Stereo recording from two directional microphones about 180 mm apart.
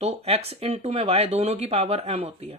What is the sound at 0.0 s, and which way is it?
Speech, 35° right (ahead or behind).